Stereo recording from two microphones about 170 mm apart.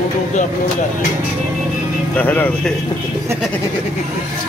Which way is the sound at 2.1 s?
10° left (ahead or behind).